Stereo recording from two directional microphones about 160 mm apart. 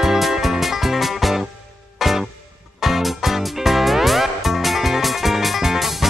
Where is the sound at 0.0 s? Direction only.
Centre (ahead or behind).